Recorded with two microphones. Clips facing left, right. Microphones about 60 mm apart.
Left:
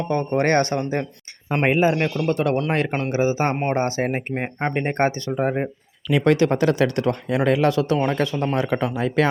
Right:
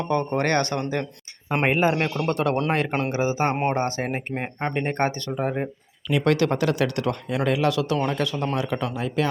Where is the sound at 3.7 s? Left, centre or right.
Left.